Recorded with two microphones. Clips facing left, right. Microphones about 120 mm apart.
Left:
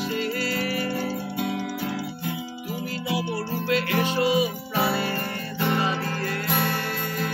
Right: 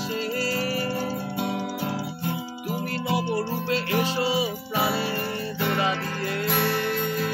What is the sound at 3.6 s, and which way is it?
Music, 30° right (ahead or behind).